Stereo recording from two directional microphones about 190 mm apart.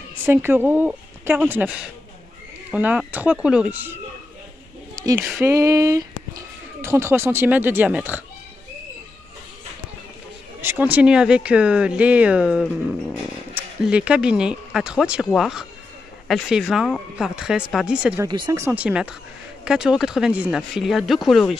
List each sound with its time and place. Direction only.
0.2 s speech: 10° right (ahead or behind)
2.7 s speech: 10° right (ahead or behind)
4.9 s a sound: 15° right (ahead or behind)
5.3 s speech: 15° right (ahead or behind)
10.6 s speech: 10° right (ahead or behind)
13.8 s speech: 5° right (ahead or behind)
18.2 s speech: 20° right (ahead or behind)
18.8 s speech: 5° right (ahead or behind)